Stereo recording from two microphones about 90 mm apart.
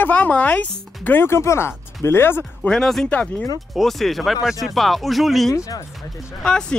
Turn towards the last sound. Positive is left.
turn(degrees=10)  # may be behind; listen again after turning